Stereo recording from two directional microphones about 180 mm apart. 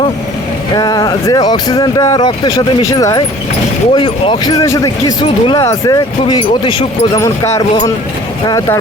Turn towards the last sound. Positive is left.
turn(degrees=20)  # may be behind; listen again after turning